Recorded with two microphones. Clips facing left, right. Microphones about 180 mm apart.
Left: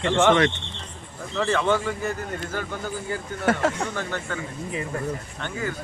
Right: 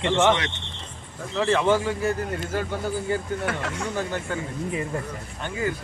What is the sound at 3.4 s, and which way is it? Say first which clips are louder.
Speech: left 6 dB; 45° left (ahead or behind).